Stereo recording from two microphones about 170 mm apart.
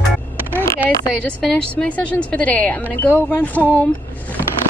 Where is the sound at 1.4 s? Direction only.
5° left (ahead or behind).